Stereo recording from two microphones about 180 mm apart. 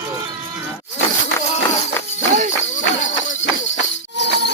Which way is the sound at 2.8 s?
90° left.